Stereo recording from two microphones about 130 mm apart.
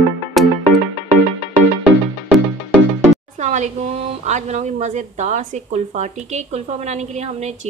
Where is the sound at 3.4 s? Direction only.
65° right (ahead or behind).